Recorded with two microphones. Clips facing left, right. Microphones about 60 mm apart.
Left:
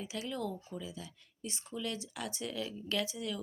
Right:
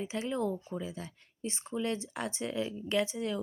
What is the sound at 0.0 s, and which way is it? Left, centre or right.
Speech, right.